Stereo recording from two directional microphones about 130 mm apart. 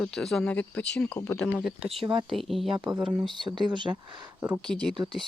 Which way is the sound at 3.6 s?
35° right (ahead or behind).